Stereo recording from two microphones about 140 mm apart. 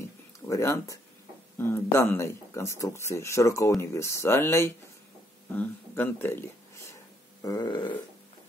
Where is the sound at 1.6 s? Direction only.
15° left (ahead or behind).